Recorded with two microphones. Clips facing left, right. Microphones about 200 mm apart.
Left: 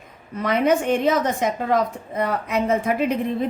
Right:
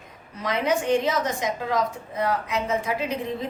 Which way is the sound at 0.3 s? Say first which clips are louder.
Left 5 dB; 55° left (ahead or behind).